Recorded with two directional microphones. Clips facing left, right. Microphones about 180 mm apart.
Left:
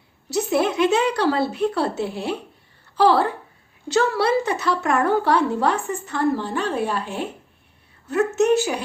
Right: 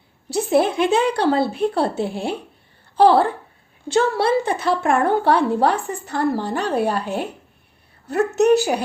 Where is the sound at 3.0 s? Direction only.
30° right (ahead or behind).